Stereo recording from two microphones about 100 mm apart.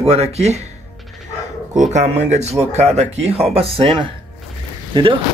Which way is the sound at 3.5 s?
75° right (ahead or behind).